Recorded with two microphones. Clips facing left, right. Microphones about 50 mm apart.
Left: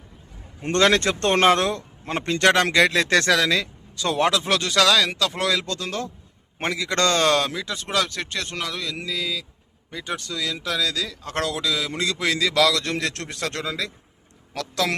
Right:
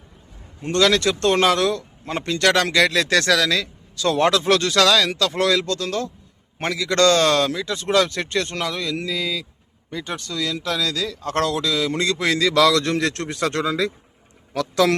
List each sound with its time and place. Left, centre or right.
0.6 s a man's voice: left; by 14.8 s centre